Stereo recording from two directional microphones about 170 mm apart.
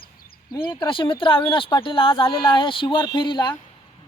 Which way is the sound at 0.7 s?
30° left (ahead or behind).